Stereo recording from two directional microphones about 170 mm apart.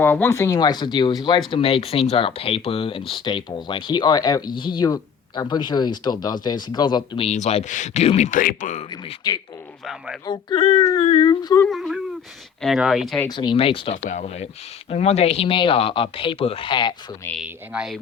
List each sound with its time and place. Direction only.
0.0 s speech: 15° left (ahead or behind)
7.3 s speech: 40° left (ahead or behind)
9.2 s speech: 25° left (ahead or behind)
9.8 s speech: centre (ahead or behind)
10.2 s speech: 30° left (ahead or behind)
11.3 s speech: 25° left (ahead or behind)
11.6 s speech: centre (ahead or behind)
13.2 s speech: 25° left (ahead or behind)
13.9 s speech: 45° left (ahead or behind); by 16.9 s 30° left (ahead or behind)
17.4 s speech: 5° right (ahead or behind)